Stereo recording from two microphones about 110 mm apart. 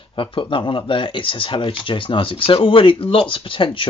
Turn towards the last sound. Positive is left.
turn(degrees=50)  # may be behind; listen again after turning